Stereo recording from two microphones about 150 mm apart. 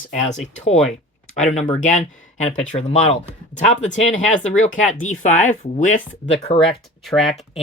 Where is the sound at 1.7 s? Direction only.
55° left (ahead or behind).